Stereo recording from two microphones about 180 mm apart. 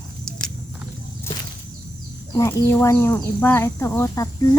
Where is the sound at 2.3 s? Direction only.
15° left (ahead or behind).